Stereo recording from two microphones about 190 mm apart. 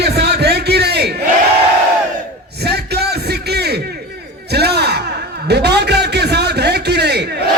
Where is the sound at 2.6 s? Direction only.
60° right (ahead or behind).